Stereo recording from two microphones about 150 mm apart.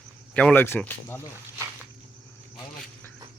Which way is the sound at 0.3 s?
10° left (ahead or behind).